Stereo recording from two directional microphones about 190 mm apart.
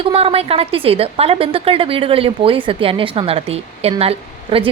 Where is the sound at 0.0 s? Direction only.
30° right (ahead or behind).